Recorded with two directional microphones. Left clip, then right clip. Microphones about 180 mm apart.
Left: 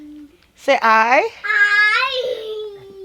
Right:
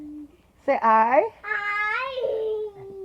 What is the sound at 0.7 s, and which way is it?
Speech, 40° left (ahead or behind).